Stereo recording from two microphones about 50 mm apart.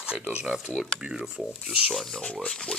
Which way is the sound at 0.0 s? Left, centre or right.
Centre.